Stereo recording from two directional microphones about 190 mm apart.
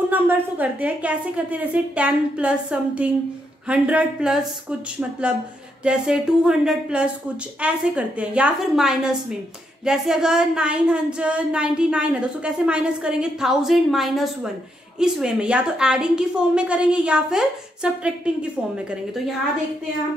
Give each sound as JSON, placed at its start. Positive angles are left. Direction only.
{"t": 0.1, "sound": "a woman's voice", "side_deg": -10}
{"t": 5.9, "sound": "speech", "side_deg": -5}